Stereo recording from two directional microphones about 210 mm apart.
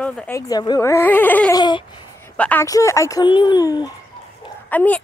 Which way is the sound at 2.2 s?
5° left (ahead or behind).